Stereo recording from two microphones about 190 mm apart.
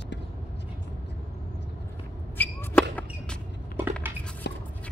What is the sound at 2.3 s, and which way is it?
Chop, 10° left (ahead or behind).